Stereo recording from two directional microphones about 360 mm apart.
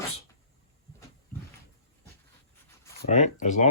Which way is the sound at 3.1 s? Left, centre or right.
Centre.